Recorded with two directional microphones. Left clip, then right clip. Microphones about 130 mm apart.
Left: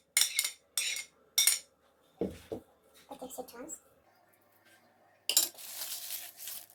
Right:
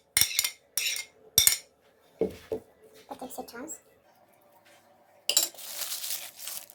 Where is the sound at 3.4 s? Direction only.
35° right (ahead or behind).